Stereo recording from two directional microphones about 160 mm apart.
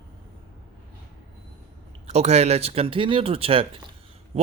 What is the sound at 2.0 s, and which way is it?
Speech, 45° right (ahead or behind).